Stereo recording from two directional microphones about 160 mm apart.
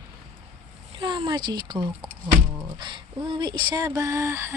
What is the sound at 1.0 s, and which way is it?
Speech, 30° right (ahead or behind).